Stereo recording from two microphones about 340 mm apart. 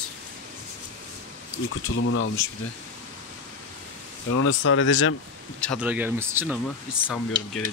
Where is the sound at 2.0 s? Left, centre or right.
Left.